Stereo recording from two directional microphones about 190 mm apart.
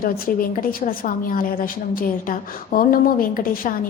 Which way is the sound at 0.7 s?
45° left (ahead or behind).